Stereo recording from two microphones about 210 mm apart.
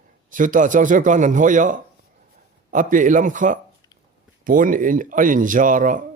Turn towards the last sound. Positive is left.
turn(degrees=-40)  # may be behind; listen again after turning